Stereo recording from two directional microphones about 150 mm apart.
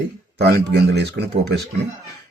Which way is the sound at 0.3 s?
90° right.